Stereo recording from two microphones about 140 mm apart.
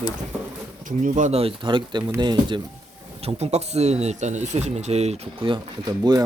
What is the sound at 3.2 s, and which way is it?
Speech, 45° right (ahead or behind).